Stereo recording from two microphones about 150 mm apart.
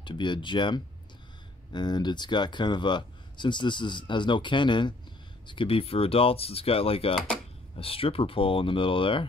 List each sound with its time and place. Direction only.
0.0 s speech: 30° left (ahead or behind)